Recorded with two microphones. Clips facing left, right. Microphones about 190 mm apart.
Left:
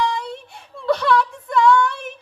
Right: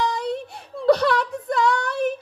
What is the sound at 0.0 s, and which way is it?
Whimper, 40° right (ahead or behind).